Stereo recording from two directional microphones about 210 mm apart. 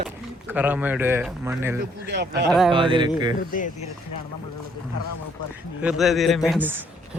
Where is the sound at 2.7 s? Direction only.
25° right (ahead or behind).